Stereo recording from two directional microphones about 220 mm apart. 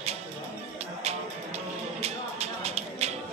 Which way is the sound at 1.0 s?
30° right (ahead or behind).